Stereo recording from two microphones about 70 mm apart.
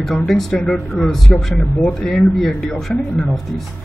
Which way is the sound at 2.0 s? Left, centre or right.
Centre.